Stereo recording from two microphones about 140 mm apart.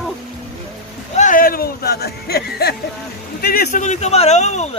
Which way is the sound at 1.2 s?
80° left.